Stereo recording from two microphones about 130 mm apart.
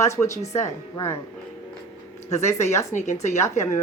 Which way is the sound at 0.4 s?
60° left (ahead or behind).